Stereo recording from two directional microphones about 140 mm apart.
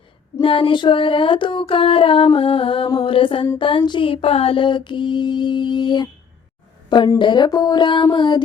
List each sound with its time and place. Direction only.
0.4 s female singing: 40° left (ahead or behind)
7.2 s female singing: 35° left (ahead or behind)